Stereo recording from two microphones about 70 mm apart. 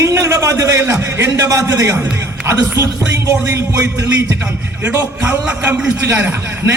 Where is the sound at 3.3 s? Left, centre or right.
Right.